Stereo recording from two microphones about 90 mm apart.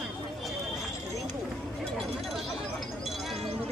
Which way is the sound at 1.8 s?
Centre (ahead or behind).